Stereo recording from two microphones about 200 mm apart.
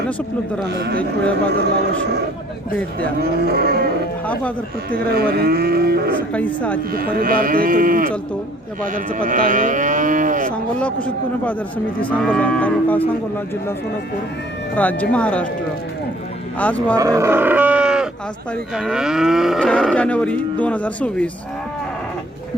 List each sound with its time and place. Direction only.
0.7 s a man's voice: 55° right (ahead or behind)
3.2 s livestock: 50° right (ahead or behind)
4.3 s speech: 5° left (ahead or behind)
4.9 s livestock: 50° right (ahead or behind)
6.3 s speech: 5° left (ahead or behind)
6.9 s livestock: 45° right (ahead or behind)
8.9 s moo: 45° right (ahead or behind)
10.5 s speech: 5° left (ahead or behind)
14.8 s speech: 5° left (ahead or behind)
16.6 s speech: 5° left (ahead or behind)
17.0 s livestock: 15° right (ahead or behind)
18.5 s moo: centre (ahead or behind)